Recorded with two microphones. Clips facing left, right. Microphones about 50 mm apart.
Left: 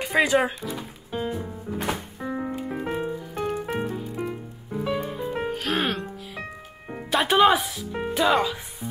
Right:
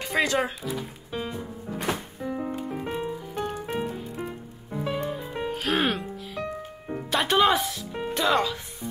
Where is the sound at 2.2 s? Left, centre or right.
Left.